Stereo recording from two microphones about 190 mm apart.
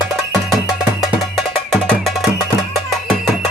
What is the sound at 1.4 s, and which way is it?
Music, centre (ahead or behind).